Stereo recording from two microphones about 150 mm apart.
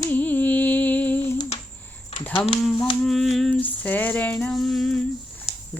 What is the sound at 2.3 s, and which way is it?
Speech, 40° left (ahead or behind).